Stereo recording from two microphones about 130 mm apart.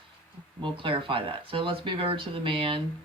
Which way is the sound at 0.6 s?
40° right (ahead or behind).